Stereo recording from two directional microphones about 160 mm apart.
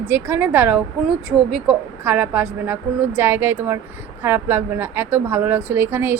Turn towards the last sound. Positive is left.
turn(degrees=-15)  # may be behind; listen again after turning